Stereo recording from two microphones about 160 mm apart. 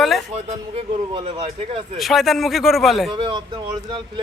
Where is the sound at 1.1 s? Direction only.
40° right (ahead or behind).